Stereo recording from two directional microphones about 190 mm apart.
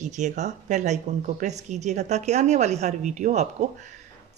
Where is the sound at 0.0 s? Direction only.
40° right (ahead or behind).